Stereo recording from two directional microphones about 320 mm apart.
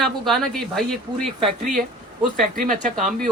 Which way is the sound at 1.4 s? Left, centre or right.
Centre.